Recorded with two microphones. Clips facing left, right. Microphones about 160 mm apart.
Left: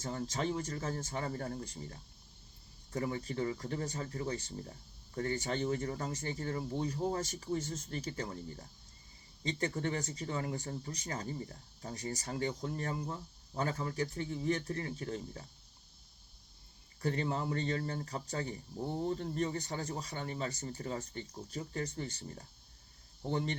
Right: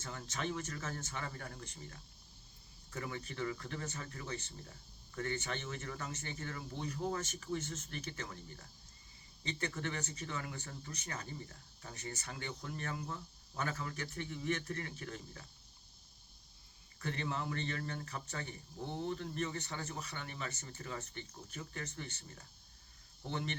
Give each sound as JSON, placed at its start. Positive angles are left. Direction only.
{"t": 0.0, "sound": "speech", "side_deg": 35}
{"t": 17.0, "sound": "speech", "side_deg": 35}